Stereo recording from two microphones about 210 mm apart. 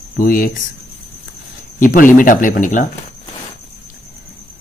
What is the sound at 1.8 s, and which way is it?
A man's voice, 40° left (ahead or behind).